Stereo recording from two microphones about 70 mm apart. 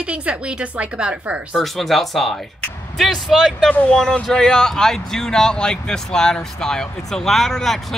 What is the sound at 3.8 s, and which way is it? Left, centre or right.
Speech, centre.